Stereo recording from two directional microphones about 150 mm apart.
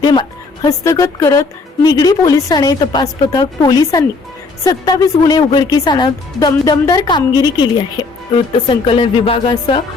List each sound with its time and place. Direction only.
0.0 s speech: 30° left (ahead or behind)